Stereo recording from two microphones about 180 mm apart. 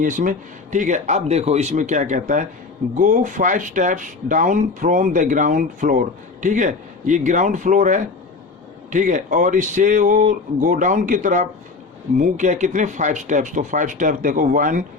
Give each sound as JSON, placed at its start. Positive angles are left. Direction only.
{"t": 0.0, "sound": "speech", "side_deg": -50}